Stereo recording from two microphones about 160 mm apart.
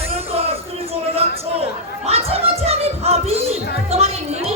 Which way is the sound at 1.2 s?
40° right (ahead or behind).